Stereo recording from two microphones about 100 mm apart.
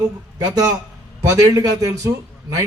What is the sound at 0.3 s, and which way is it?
A man's voice, 35° right (ahead or behind).